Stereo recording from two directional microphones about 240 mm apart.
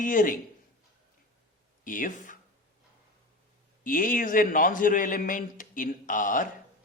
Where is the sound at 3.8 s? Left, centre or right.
Left.